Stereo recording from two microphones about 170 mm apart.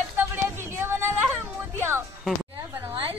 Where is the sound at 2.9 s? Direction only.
30° right (ahead or behind).